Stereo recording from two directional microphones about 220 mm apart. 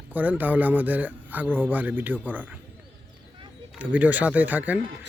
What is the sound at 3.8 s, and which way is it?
Speech, 5° right (ahead or behind).